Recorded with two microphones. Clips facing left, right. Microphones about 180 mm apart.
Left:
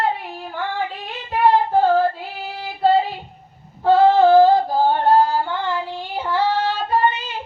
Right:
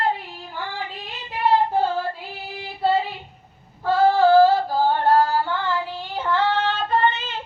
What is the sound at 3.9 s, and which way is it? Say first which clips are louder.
Female singing: left 3 dB; 20° left (ahead or behind).